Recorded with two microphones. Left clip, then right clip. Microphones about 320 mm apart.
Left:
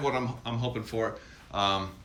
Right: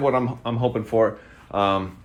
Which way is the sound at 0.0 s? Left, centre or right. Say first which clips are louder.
Right 8 dB; centre.